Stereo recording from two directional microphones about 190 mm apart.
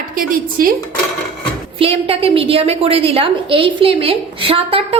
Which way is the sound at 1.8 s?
30° right (ahead or behind).